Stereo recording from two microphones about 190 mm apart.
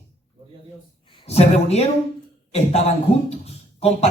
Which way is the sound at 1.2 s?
35° left (ahead or behind).